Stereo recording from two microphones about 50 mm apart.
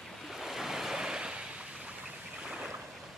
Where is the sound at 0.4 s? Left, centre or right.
Centre.